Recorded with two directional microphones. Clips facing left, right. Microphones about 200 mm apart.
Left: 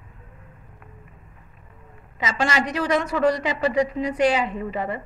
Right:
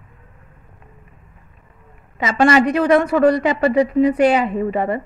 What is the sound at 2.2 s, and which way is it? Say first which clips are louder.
A woman's voice: right 9 dB; 60° right (ahead or behind).